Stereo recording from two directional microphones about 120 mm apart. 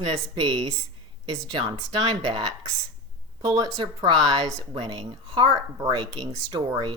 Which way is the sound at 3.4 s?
30° right (ahead or behind).